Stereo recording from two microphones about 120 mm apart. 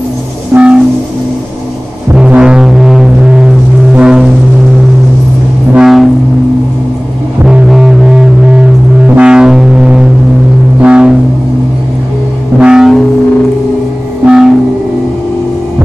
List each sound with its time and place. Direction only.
0.5 s train: 20° right (ahead or behind)
2.1 s music: 10° right (ahead or behind)
5.8 s vehicle: centre (ahead or behind)
7.4 s music: 5° right (ahead or behind)
12.5 s music: 5° right (ahead or behind)
14.2 s train: 5° right (ahead or behind)